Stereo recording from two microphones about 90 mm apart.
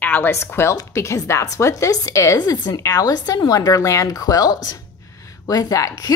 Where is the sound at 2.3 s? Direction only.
50° left (ahead or behind).